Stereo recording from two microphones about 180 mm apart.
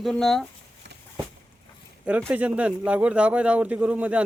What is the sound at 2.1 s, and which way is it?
A man's voice, 10° right (ahead or behind).